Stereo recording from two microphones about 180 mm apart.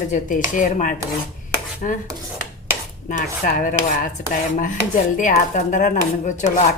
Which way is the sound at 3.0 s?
45° left (ahead or behind).